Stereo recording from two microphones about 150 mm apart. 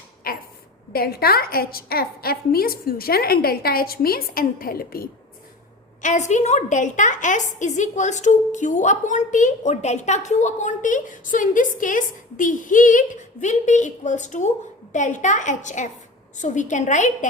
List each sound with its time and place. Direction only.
0.3 s a sound: 75° left (ahead or behind)
0.9 s a woman's voice: 90° left
6.0 s a woman's voice: 55° left (ahead or behind)